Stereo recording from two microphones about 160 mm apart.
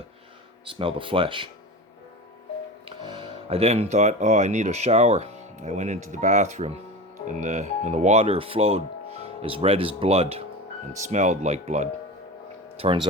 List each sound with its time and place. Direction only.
0.6 s speech: 35° right (ahead or behind)
3.0 s speech: 30° right (ahead or behind)
12.8 s speech: 35° right (ahead or behind)